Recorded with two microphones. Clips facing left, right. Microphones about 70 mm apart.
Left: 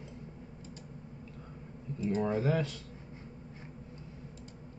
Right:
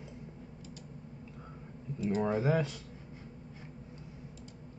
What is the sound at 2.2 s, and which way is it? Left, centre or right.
Speech, centre.